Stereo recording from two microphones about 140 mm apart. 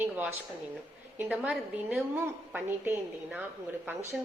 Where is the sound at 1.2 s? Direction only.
10° right (ahead or behind).